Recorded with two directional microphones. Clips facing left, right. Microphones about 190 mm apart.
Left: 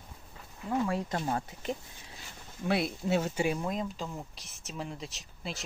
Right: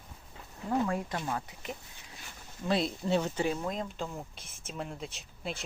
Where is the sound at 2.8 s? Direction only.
5° left (ahead or behind).